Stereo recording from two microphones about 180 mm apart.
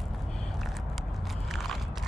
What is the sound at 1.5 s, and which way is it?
Biting, centre (ahead or behind).